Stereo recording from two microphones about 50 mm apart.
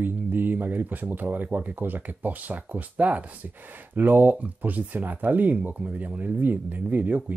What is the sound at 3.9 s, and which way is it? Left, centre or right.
Speech, right.